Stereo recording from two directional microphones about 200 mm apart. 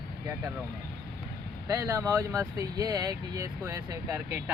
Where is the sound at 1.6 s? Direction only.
15° right (ahead or behind).